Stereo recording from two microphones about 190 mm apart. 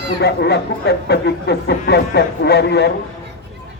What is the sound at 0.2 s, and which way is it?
Speech, 60° left (ahead or behind).